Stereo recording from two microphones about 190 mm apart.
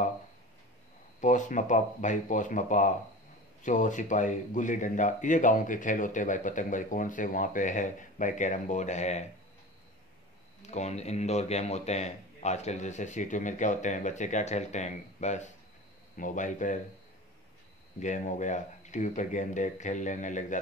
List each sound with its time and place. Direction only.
1.2 s speech: 40° left (ahead or behind)
10.7 s speech: 35° left (ahead or behind)
17.9 s speech: 40° left (ahead or behind)